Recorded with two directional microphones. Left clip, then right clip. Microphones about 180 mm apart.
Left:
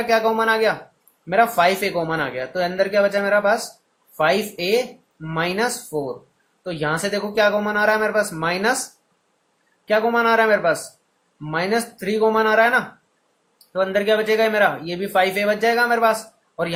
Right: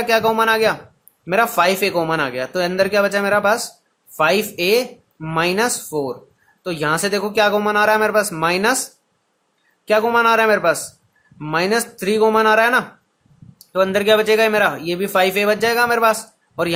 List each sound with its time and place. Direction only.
0.0 s speech: 35° right (ahead or behind)